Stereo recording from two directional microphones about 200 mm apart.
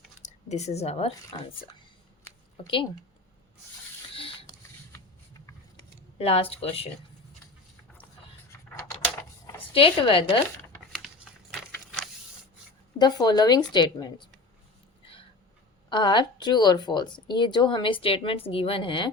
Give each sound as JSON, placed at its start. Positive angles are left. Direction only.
{"t": 0.2, "sound": "speech", "side_deg": 35}
{"t": 4.1, "sound": "a sound", "side_deg": 25}
{"t": 6.1, "sound": "speech", "side_deg": 30}
{"t": 9.7, "sound": "speech", "side_deg": 25}
{"t": 13.0, "sound": "speech", "side_deg": 20}
{"t": 15.9, "sound": "speech", "side_deg": 20}